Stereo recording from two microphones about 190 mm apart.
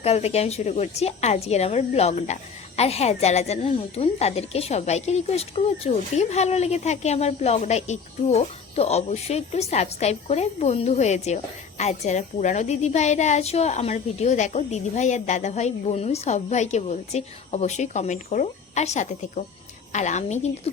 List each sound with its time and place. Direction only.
0.0 s a woman's voice: 35° left (ahead or behind)